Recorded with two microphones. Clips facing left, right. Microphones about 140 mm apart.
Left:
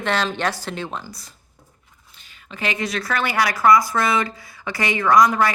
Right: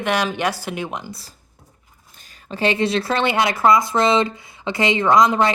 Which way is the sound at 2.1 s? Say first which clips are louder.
Right 7 dB; 40° right (ahead or behind).